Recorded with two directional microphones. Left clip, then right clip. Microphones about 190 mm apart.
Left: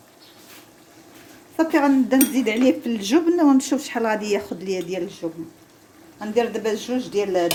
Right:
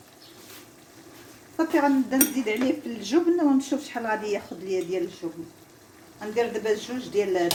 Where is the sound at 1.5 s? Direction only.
60° left (ahead or behind).